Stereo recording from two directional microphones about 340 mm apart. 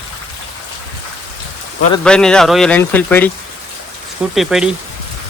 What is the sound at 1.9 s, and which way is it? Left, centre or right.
Speech, centre.